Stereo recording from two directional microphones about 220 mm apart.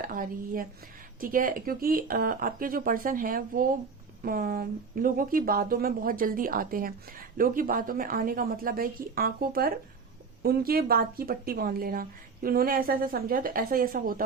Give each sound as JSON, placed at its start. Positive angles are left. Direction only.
{"t": 0.0, "sound": "speech", "side_deg": -40}